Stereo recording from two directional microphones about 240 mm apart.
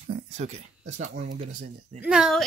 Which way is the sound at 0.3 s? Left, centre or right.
Right.